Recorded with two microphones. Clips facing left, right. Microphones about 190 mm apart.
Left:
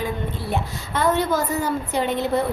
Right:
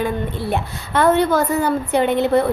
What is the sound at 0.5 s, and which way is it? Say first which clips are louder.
A woman's voice: right 5 dB; 60° right (ahead or behind).